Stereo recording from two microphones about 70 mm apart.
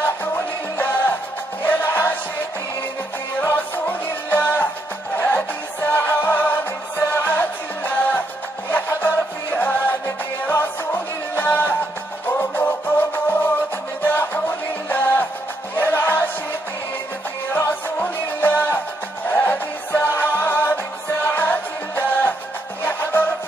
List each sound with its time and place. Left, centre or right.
0.7 s music: left
3.3 s music: left
17.5 s music: left